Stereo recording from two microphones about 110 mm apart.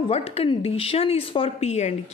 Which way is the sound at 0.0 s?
65° left (ahead or behind).